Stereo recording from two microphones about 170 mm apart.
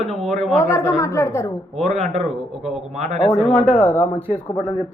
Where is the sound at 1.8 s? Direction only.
40° right (ahead or behind).